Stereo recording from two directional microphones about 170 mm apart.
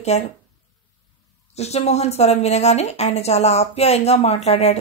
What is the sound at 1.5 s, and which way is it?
A woman's voice, 40° left (ahead or behind).